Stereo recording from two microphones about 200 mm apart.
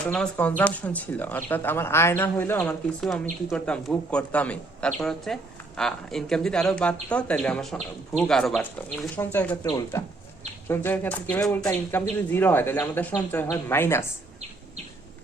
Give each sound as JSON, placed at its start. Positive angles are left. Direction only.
{"t": 0.0, "sound": "a man's voice", "side_deg": 5}